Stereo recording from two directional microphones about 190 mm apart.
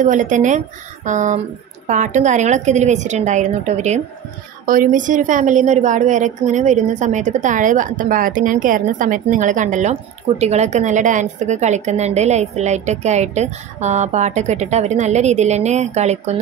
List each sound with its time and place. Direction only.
0.0 s a woman's voice: 40° right (ahead or behind)